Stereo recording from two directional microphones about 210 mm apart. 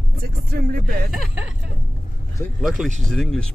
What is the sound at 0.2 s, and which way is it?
Speech, 45° right (ahead or behind).